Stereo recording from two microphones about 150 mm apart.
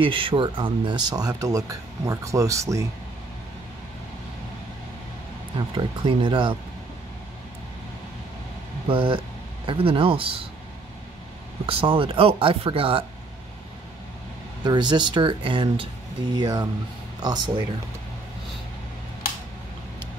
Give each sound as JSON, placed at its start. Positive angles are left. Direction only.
{"t": 0.0, "sound": "speech", "side_deg": -35}
{"t": 5.8, "sound": "speech", "side_deg": -30}
{"t": 8.8, "sound": "speech", "side_deg": -35}
{"t": 11.6, "sound": "speech", "side_deg": -35}
{"t": 14.6, "sound": "speech", "side_deg": -30}